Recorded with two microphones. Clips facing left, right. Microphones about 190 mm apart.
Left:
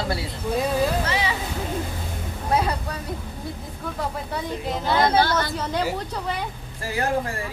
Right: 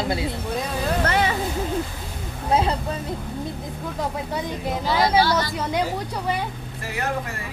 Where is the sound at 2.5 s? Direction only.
25° right (ahead or behind).